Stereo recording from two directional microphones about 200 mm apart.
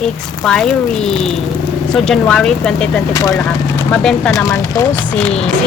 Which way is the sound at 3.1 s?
15° left (ahead or behind).